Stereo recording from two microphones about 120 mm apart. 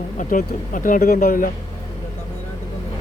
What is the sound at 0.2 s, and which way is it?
Speech, 90° left.